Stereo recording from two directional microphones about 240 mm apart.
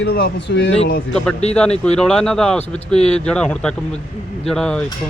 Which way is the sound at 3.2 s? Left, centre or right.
Centre.